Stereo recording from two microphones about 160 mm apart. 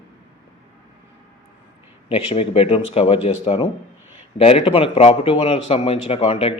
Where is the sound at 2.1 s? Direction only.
35° left (ahead or behind).